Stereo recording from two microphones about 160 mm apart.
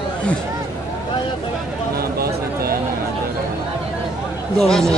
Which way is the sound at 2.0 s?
70° right (ahead or behind).